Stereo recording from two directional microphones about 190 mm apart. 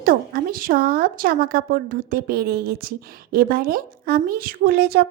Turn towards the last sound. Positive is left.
turn(degrees=-55)  # may be behind; listen again after turning